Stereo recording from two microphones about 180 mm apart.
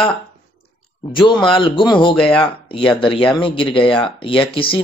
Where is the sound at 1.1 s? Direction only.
25° left (ahead or behind).